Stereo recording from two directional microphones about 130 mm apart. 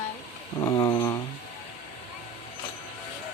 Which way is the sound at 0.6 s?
30° left (ahead or behind).